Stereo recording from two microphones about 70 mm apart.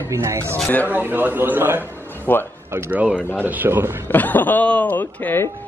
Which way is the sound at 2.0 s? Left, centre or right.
Left.